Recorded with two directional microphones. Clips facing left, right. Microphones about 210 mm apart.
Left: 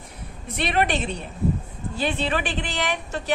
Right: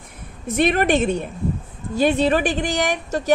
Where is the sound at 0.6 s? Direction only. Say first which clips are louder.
Right 6 dB; 45° right (ahead or behind).